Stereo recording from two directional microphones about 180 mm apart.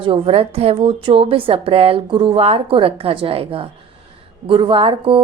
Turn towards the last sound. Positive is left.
turn(degrees=-30)  # may be behind; listen again after turning